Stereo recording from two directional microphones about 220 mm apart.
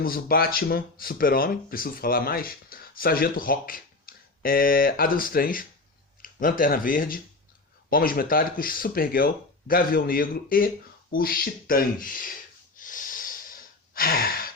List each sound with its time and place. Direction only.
0.0 s speech: 40° left (ahead or behind)
12.7 s breathing: 35° left (ahead or behind)